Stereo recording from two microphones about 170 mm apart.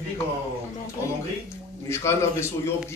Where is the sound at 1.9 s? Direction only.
15° left (ahead or behind).